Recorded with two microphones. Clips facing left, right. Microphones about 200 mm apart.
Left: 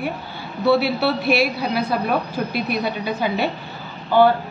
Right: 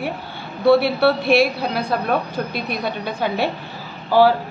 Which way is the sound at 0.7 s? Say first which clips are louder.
Right 3 dB; centre (ahead or behind).